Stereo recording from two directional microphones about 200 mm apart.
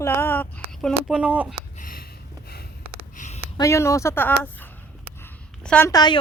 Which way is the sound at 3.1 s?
40° left (ahead or behind).